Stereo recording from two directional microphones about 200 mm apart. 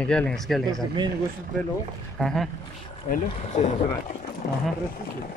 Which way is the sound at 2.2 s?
Centre (ahead or behind).